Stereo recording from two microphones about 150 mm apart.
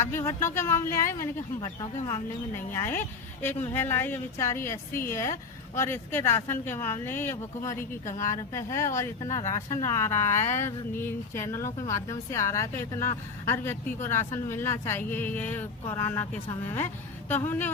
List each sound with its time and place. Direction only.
0.0 s a woman's voice: 15° left (ahead or behind)